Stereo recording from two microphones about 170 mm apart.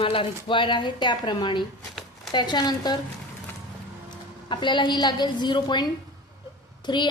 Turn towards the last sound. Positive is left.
turn(degrees=25)  # may be behind; listen again after turning